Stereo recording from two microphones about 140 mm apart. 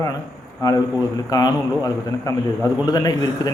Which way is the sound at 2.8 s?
25° left (ahead or behind).